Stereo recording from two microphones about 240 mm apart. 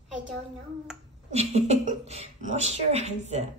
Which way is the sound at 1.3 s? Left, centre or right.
Right.